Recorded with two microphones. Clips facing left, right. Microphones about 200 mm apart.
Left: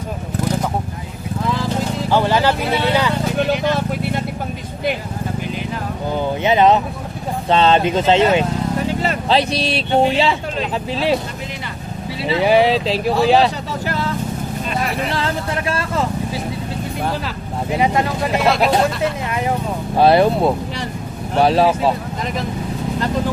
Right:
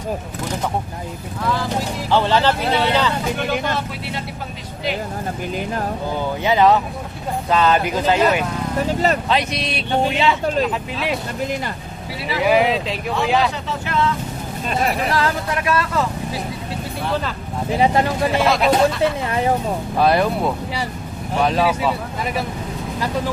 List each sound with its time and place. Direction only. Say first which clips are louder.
2.0 s speech: even; 15° left (ahead or behind)
3.5 s speech: left 4 dB; 50° right (ahead or behind)
6.4 s speech: left 1 dB; 20° left (ahead or behind)
8.9 s speech: right 2 dB; 40° right (ahead or behind)
9.3 s speech: left 4 dB; 30° left (ahead or behind)
12.3 s speech: left 3 dB; 30° left (ahead or behind)
15.1 s speech: right 1 dB; 30° left (ahead or behind)
17.7 s speech: right 1 dB; 30° right (ahead or behind)
18.4 s speech: left 1 dB; centre (ahead or behind)
20.0 s speech: left 5 dB; 30° left (ahead or behind)